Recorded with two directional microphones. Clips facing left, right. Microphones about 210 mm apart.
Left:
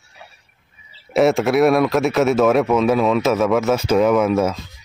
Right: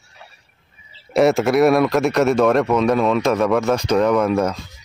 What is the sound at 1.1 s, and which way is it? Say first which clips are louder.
A man's voice: even; centre (ahead or behind).